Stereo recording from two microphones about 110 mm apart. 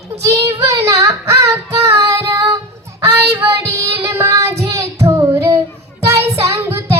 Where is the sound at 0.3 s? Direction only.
25° right (ahead or behind).